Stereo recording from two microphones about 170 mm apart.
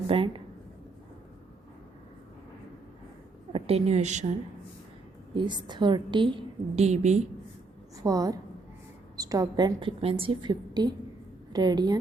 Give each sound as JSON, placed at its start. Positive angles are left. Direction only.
{"t": 0.1, "sound": "a woman's voice", "side_deg": -30}
{"t": 3.5, "sound": "a woman's voice", "side_deg": -35}
{"t": 5.3, "sound": "a woman's voice", "side_deg": -25}
{"t": 8.0, "sound": "a woman's voice", "side_deg": -20}